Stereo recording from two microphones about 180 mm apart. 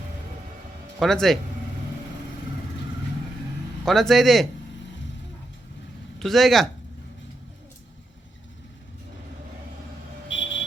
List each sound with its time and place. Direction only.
0.9 s a man's voice: centre (ahead or behind)
3.8 s a man's voice: centre (ahead or behind)
6.1 s a man's voice: centre (ahead or behind)
10.2 s a sound: 90° left